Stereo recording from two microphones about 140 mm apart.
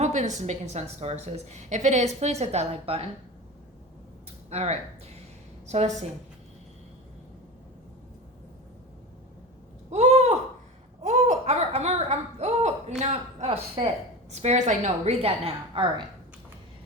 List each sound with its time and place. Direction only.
0.0 s a woman's voice: 55° right (ahead or behind)
4.4 s a woman's voice: 50° right (ahead or behind)
9.9 s a sound: 55° right (ahead or behind)
13.0 s a woman's voice: 50° right (ahead or behind)